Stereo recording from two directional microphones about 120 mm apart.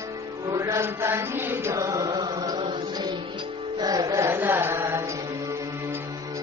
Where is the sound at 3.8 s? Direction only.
30° right (ahead or behind).